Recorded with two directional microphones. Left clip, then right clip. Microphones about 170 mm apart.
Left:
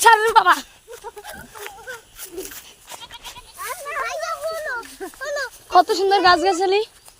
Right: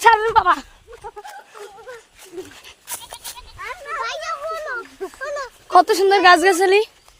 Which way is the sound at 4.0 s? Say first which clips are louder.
Even; centre (ahead or behind).